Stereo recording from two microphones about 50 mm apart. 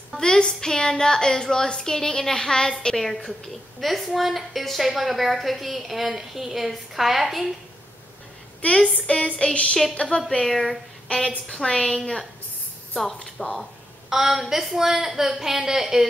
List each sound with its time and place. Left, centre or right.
0.2 s a woman's voice: centre
3.8 s a woman's voice: centre
8.9 s a sound: centre
9.9 s a woman's voice: centre
11.1 s a woman's voice: centre
14.1 s a woman's voice: centre